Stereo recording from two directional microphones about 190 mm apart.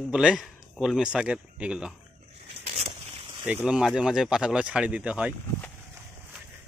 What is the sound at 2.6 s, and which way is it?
Vehicle, 35° right (ahead or behind).